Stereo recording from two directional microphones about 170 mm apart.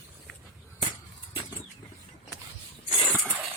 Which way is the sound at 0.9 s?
25° left (ahead or behind).